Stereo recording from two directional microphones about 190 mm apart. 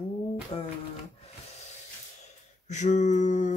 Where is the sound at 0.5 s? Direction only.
30° left (ahead or behind).